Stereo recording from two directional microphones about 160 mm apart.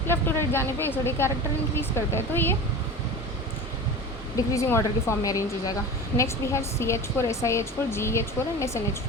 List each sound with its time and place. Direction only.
0.1 s a woman's voice: 15° left (ahead or behind)
4.4 s a woman's voice: 20° left (ahead or behind)